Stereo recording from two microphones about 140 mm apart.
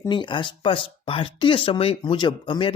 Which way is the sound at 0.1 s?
35° left (ahead or behind).